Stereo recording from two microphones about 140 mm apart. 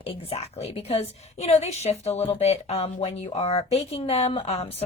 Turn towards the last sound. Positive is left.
turn(degrees=45)  # may be behind; listen again after turning